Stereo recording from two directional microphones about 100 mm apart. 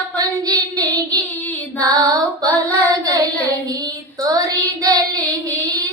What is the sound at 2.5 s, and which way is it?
Child singing, 15° left (ahead or behind).